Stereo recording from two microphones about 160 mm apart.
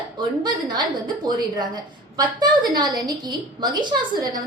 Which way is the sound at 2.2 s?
25° right (ahead or behind).